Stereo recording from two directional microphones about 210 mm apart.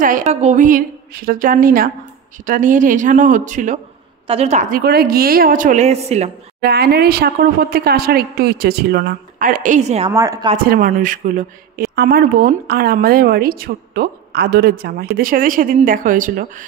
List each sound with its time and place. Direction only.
0.0 s a woman's voice: 35° right (ahead or behind)
6.6 s speech: 50° right (ahead or behind); by 10.1 s 30° right (ahead or behind)
10.1 s speech: 15° right (ahead or behind)
10.7 s speech: 40° right (ahead or behind)